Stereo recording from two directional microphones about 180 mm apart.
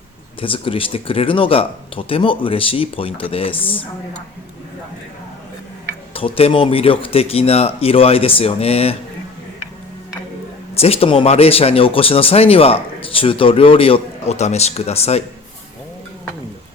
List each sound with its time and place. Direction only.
0.3 s speech: 30° left (ahead or behind)
6.1 s speech: 30° left (ahead or behind)
10.8 s speech: 35° left (ahead or behind)